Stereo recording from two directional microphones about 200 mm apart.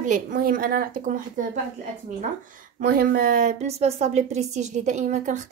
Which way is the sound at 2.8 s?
45° right (ahead or behind).